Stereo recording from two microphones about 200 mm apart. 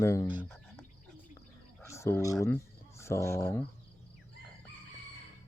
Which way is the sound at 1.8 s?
15° left (ahead or behind).